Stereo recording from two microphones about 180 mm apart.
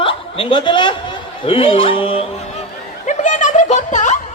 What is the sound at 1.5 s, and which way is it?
Speech, 30° left (ahead or behind).